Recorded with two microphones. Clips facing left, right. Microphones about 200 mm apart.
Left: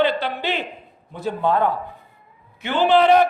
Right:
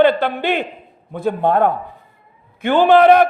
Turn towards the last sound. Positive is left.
turn(degrees=-55)  # may be behind; listen again after turning